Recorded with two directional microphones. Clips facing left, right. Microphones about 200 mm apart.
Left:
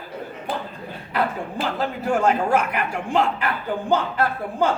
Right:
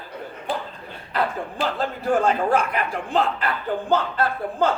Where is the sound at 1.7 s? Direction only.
10° left (ahead or behind).